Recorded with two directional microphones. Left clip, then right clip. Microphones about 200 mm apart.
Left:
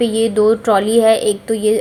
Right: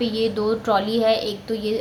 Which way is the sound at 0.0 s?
30° left (ahead or behind).